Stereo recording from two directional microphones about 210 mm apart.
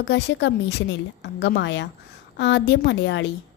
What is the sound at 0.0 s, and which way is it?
A woman's voice, 55° left (ahead or behind).